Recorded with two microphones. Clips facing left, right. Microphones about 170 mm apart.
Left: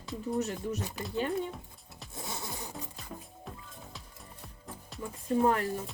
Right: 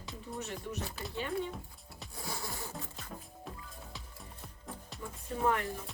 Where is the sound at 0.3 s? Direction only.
40° left (ahead or behind).